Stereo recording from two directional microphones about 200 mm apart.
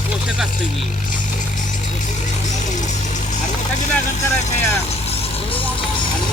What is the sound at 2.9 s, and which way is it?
Vehicle, 35° left (ahead or behind).